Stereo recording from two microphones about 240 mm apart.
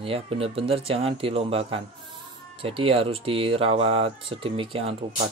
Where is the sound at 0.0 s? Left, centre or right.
Right.